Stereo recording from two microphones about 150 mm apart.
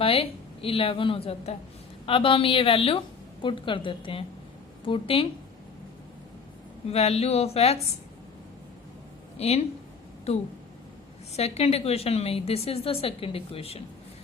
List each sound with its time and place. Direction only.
0.0 s a woman's voice: 40° left (ahead or behind)
6.9 s speech: 45° left (ahead or behind)
9.4 s a woman's voice: 45° left (ahead or behind)